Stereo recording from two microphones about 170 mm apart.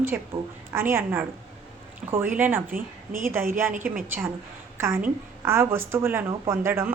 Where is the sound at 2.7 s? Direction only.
55° right (ahead or behind).